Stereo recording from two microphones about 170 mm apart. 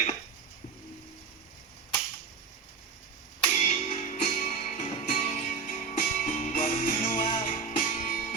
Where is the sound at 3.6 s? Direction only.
45° left (ahead or behind).